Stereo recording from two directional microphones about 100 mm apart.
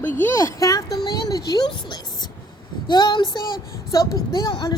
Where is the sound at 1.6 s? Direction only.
50° left (ahead or behind).